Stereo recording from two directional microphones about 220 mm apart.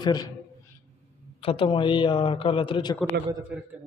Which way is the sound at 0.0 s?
20° left (ahead or behind).